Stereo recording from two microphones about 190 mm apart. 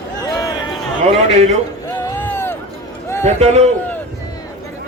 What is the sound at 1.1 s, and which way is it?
Speech, 35° right (ahead or behind).